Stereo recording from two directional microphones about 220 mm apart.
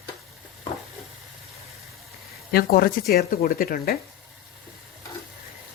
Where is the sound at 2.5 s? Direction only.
45° left (ahead or behind).